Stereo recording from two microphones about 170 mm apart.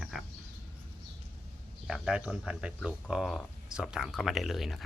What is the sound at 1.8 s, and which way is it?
Speech, 5° right (ahead or behind).